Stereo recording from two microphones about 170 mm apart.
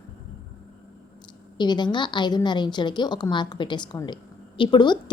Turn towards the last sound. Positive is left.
turn(degrees=25)  # may be behind; listen again after turning